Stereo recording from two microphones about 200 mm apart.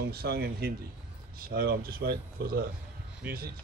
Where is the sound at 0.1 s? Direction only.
50° right (ahead or behind).